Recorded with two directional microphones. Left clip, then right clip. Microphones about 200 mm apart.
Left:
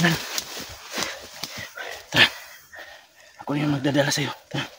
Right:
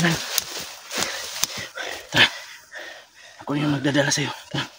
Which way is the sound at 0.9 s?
45° right (ahead or behind).